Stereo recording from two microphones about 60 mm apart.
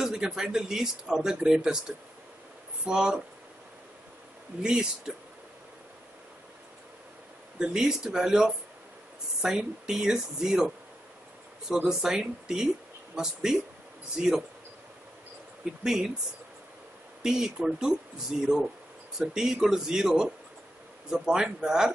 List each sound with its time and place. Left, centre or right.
0.0 s speech: centre
4.6 s speech: centre
7.5 s speech: centre
11.7 s speech: centre
15.8 s speech: centre
17.2 s speech: centre